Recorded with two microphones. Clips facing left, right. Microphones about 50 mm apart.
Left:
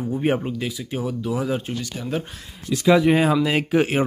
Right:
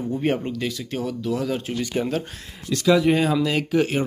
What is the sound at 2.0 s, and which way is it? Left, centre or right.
Speech, right.